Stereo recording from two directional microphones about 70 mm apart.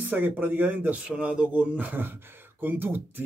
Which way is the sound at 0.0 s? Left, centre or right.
Right.